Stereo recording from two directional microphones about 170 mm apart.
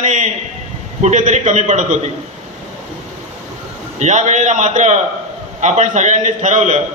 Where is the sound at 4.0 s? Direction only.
45° right (ahead or behind).